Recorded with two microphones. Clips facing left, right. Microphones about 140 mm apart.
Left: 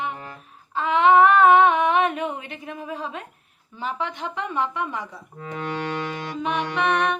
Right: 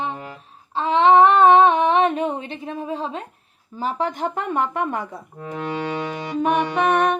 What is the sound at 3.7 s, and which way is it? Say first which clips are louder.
A woman's voice: right 5 dB; 40° right (ahead or behind).